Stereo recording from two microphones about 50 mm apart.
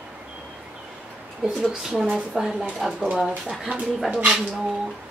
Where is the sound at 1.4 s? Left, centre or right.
Centre.